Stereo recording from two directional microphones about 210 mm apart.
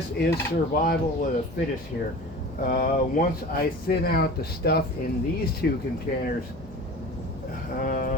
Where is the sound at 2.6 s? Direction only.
40° left (ahead or behind).